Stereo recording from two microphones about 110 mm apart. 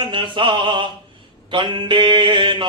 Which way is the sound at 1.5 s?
50° right (ahead or behind).